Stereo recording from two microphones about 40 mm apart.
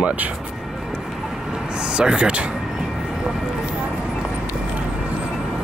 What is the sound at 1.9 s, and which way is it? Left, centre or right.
Speech, right.